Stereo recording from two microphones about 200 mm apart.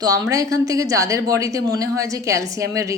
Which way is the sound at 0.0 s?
20° right (ahead or behind).